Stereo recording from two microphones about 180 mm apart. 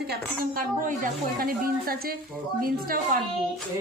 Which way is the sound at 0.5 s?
50° right (ahead or behind).